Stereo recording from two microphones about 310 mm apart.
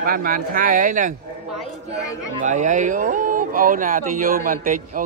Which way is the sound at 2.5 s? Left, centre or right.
Right.